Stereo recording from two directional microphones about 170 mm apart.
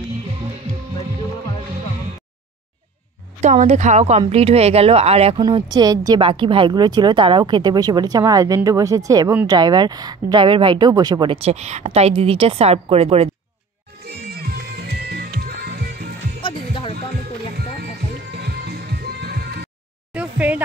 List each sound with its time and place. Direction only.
3.4 s speech: 45° right (ahead or behind)
5.4 s speech: 25° right (ahead or behind)
14.4 s music: 70° right (ahead or behind)
16.4 s music: 30° left (ahead or behind)
18.3 s music: 75° right (ahead or behind)
20.2 s a sound: 10° right (ahead or behind)